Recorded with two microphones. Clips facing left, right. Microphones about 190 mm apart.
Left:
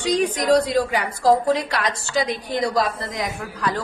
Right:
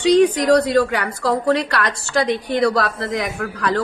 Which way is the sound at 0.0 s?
65° right (ahead or behind).